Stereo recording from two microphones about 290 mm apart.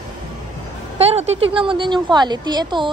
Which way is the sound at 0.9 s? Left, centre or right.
Right.